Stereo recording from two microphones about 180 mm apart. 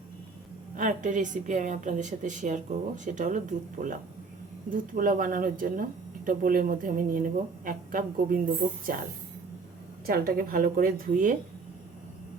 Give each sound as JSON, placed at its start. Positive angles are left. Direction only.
{"t": 0.8, "sound": "a woman's voice", "side_deg": -45}
{"t": 10.1, "sound": "a woman's voice", "side_deg": -55}